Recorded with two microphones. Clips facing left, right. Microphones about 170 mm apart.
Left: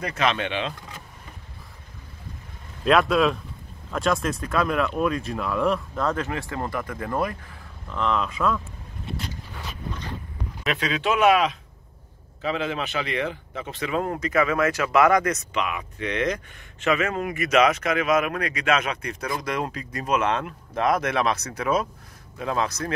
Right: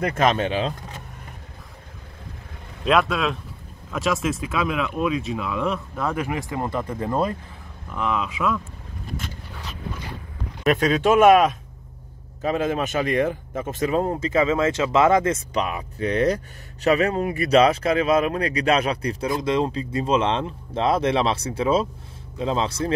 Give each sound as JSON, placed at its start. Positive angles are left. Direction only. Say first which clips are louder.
{"t": 0.0, "sound": "speech", "louder": "right 4 dB", "side_deg": -50}
{"t": 2.8, "sound": "speech", "louder": "left 1 dB", "side_deg": 0}
{"t": 7.9, "sound": "speech", "louder": "even", "side_deg": -5}
{"t": 10.6, "sound": "speech", "louder": "right 7 dB", "side_deg": -45}